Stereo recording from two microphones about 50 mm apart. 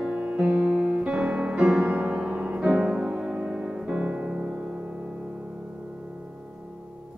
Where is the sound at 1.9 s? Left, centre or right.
Right.